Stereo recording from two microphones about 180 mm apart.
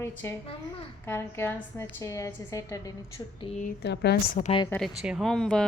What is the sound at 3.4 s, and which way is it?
Speech, 40° left (ahead or behind).